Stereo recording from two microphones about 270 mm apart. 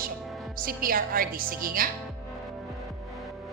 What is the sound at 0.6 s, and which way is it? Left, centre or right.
A woman's voice, right.